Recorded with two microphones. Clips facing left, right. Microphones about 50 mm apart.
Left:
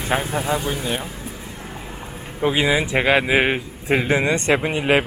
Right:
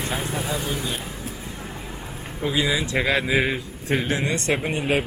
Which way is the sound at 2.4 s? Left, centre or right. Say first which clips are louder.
Left 5 dB; left.